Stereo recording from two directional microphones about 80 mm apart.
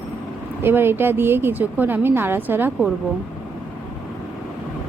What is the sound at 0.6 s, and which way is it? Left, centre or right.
Speech, right.